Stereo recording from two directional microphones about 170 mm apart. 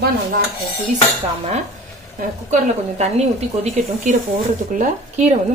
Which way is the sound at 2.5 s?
40° right (ahead or behind).